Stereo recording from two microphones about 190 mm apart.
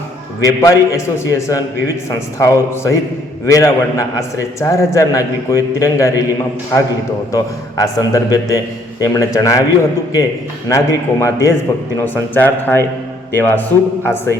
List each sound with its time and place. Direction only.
0.4 s a man's voice: 15° left (ahead or behind)
7.3 s a man's voice: 15° left (ahead or behind)
10.7 s a man's voice: 15° left (ahead or behind)